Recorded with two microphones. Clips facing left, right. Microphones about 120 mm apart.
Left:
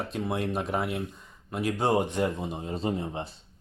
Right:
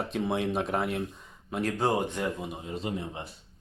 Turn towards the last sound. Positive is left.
turn(degrees=35)  # may be behind; listen again after turning